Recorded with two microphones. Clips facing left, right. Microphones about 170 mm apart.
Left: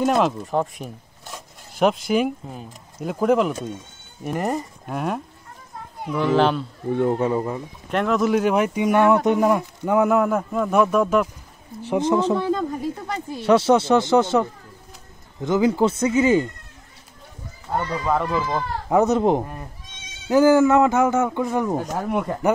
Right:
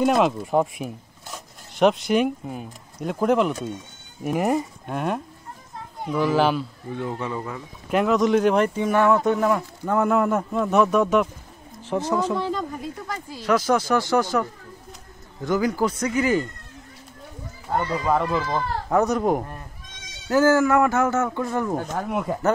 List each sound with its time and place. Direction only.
0.0 s speech: centre (ahead or behind)
6.9 s speech: 55° left (ahead or behind)
7.3 s speech: 30° left (ahead or behind)
7.9 s speech: centre (ahead or behind)
11.8 s speech: 15° left (ahead or behind)
17.7 s speech: 5° right (ahead or behind)
18.9 s speech: 20° left (ahead or behind)
22.3 s speech: 5° right (ahead or behind)